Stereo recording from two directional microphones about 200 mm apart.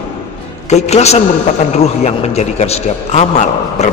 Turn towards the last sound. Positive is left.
turn(degrees=35)  # may be behind; listen again after turning